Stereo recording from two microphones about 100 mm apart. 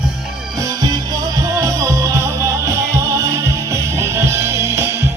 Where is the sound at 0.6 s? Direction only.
40° right (ahead or behind).